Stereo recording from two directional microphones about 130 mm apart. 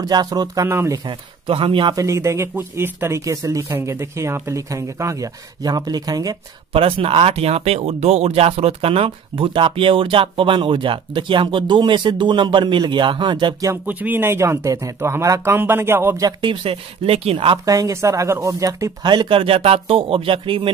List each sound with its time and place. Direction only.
0.0 s speech: 30° right (ahead or behind)
1.0 s speech: 45° right (ahead or behind)
2.0 s speech: 25° right (ahead or behind)
6.7 s speech: 45° right (ahead or behind)
13.8 s speech: 15° right (ahead or behind)
16.2 s speech: 35° right (ahead or behind)
17.6 s speech: 25° right (ahead or behind); by 20.7 s 40° right (ahead or behind)